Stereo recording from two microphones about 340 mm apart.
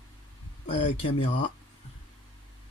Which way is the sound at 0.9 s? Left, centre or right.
Centre.